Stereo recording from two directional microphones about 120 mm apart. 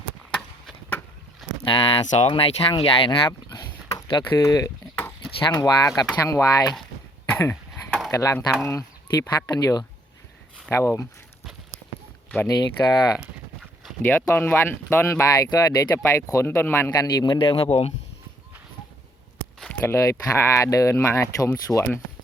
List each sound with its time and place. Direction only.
1.6 s speech: 45° left (ahead or behind)
2.0 s speech: 65° left (ahead or behind)
2.3 s speech: 50° left (ahead or behind)
4.4 s speech: 25° left (ahead or behind)
7.3 s a sound: 20° left (ahead or behind)
7.5 s a sound: centre (ahead or behind)
8.1 s speech: 25° left (ahead or behind)
12.5 s speech: 35° left (ahead or behind)
14.0 s speech: 20° left (ahead or behind)
16.9 s speech: 35° left (ahead or behind); by 17.9 s 60° left (ahead or behind)
19.8 s speech: 25° left (ahead or behind)